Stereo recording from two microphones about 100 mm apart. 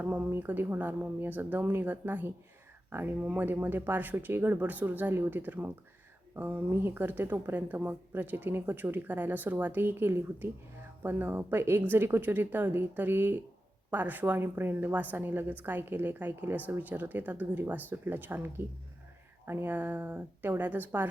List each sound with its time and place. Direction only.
0.0 s a woman's voice: 20° right (ahead or behind)